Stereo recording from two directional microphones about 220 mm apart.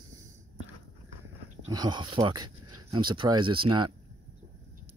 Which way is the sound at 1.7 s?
20° right (ahead or behind).